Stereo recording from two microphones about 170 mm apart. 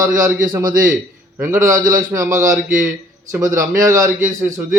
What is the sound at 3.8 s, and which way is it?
Speech, 20° right (ahead or behind).